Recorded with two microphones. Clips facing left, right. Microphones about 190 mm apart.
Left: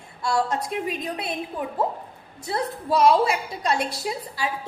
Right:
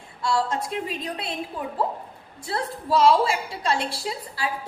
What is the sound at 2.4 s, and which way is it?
A woman's voice, 20° left (ahead or behind).